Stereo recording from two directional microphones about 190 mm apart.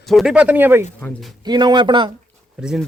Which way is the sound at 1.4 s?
25° right (ahead or behind).